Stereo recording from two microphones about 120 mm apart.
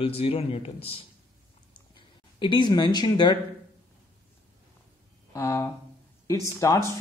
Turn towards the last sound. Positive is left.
turn(degrees=25)  # may be behind; listen again after turning